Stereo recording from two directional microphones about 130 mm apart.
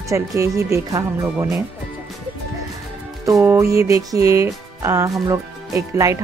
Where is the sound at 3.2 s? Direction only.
20° right (ahead or behind).